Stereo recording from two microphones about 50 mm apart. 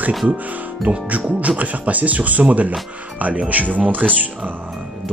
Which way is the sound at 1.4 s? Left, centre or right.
Right.